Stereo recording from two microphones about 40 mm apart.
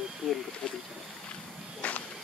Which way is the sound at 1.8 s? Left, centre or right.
Left.